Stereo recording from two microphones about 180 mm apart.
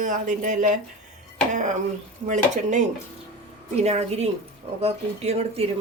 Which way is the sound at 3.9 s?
35° right (ahead or behind).